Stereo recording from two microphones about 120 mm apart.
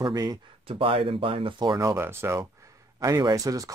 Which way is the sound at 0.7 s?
50° right (ahead or behind).